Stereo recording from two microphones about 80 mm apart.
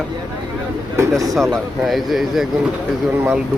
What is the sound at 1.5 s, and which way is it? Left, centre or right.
Speech, centre.